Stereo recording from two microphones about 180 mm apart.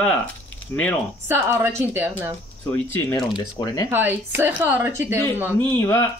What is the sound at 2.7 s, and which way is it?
Speech, 10° left (ahead or behind).